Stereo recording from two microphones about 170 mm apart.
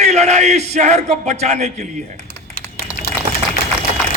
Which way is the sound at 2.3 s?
55° left (ahead or behind).